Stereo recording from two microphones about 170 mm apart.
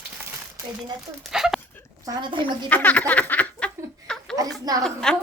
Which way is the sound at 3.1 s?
10° left (ahead or behind).